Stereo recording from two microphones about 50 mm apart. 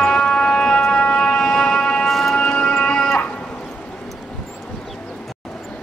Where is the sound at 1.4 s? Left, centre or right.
Centre.